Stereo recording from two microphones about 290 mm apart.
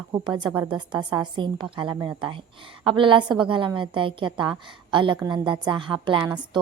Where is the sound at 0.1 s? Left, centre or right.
Centre.